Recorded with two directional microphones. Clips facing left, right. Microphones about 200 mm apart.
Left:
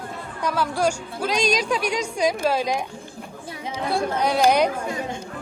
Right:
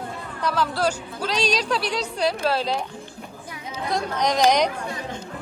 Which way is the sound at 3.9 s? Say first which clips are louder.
Left 1 dB; 10° left (ahead or behind).